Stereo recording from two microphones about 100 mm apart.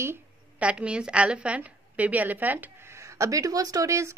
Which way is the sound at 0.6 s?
10° right (ahead or behind).